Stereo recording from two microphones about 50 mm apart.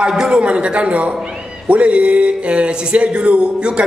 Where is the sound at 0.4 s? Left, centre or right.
Right.